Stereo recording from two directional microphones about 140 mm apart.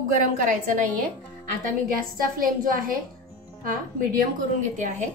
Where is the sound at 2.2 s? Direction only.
90° right.